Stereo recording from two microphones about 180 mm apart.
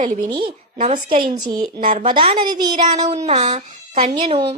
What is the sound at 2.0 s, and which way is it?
Speech, 25° right (ahead or behind).